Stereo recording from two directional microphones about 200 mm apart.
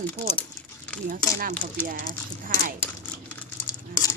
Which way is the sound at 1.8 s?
45° right (ahead or behind).